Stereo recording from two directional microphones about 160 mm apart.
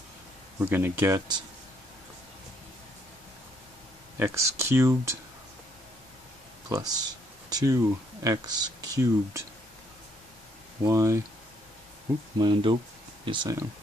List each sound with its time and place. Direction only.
0.6 s speech: 15° right (ahead or behind)
4.2 s speech: 15° right (ahead or behind)
6.7 s speech: 25° right (ahead or behind)
10.8 s speech: 20° right (ahead or behind)
12.4 s speech: 30° right (ahead or behind)